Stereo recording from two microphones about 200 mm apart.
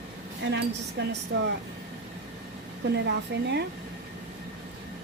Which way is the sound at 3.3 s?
55° right (ahead or behind).